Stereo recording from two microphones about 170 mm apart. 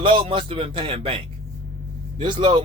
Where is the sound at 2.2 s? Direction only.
30° right (ahead or behind).